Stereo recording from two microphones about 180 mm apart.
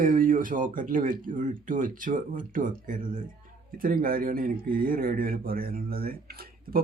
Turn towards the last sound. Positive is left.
turn(degrees=-55)  # may be behind; listen again after turning